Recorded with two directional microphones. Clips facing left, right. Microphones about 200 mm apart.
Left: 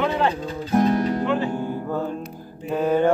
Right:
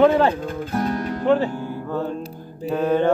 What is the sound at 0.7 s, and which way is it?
Music, 20° left (ahead or behind).